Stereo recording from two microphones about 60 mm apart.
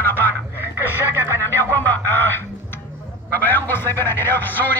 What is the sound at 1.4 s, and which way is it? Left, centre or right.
Music, left.